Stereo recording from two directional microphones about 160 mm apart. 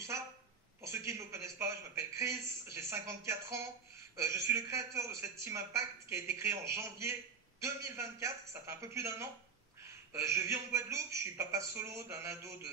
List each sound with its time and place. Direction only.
0.8 s speech: 20° right (ahead or behind)